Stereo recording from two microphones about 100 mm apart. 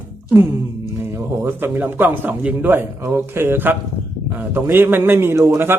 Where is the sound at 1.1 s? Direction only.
25° right (ahead or behind).